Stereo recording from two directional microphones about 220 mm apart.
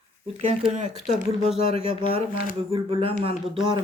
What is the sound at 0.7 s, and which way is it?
Speech, 30° right (ahead or behind).